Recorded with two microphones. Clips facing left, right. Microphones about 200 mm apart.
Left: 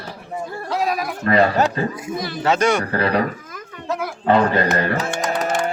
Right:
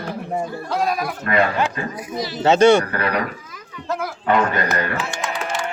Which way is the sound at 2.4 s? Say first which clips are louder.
Right 6 dB; 25° right (ahead or behind).